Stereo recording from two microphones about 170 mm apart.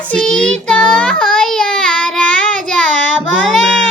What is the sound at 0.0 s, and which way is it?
Child singing, 5° left (ahead or behind).